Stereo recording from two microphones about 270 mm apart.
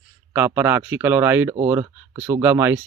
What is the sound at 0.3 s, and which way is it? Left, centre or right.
Speech, centre.